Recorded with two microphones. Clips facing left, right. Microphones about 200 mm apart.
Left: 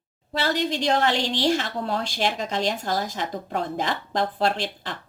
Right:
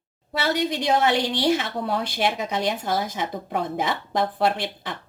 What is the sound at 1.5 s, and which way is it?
Speech, 5° right (ahead or behind).